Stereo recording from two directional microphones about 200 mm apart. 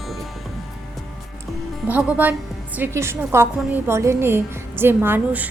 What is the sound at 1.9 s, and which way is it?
A woman's voice, 5° right (ahead or behind).